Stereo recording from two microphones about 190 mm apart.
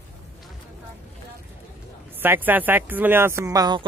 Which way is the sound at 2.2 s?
10° right (ahead or behind).